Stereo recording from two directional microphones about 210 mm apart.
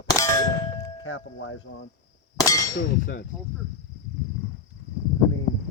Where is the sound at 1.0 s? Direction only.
70° left (ahead or behind).